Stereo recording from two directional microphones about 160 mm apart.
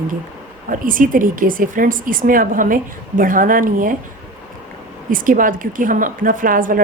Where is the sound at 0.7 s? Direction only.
60° right (ahead or behind).